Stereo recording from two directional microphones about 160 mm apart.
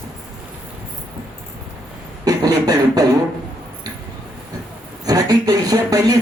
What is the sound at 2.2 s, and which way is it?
Beatboxing, 20° right (ahead or behind).